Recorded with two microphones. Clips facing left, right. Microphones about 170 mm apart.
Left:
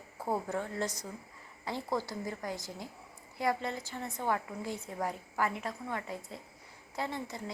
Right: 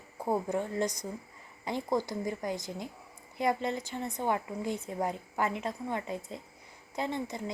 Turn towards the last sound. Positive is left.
turn(degrees=-20)  # may be behind; listen again after turning